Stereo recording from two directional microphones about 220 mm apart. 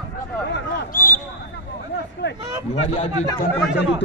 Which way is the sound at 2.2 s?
50° left (ahead or behind).